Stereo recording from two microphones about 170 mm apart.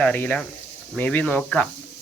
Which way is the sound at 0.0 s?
10° left (ahead or behind).